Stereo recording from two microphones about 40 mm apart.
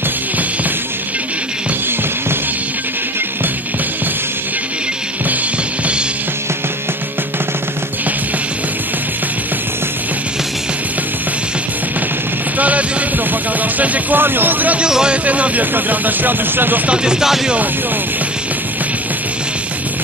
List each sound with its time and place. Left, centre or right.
12.5 s a sound: right
13.3 s music: right
14.2 s speech: right
14.9 s speech: centre
15.2 s speech: right
15.7 s speech: right
16.8 s speech: right